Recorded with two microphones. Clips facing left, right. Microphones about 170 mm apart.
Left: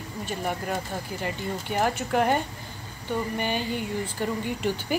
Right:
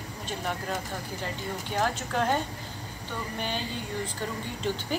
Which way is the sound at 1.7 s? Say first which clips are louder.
Left 4 dB; 15° left (ahead or behind).